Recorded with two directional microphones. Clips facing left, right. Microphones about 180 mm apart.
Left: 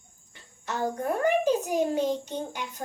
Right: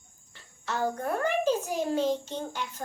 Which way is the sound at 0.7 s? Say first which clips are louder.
Left 1 dB; 15° left (ahead or behind).